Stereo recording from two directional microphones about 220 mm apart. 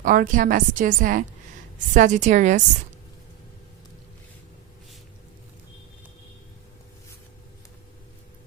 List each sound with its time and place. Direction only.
0.0 s a woman's voice: 40° right (ahead or behind)